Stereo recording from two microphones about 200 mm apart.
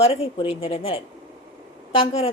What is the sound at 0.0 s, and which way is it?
A woman's voice, 30° left (ahead or behind).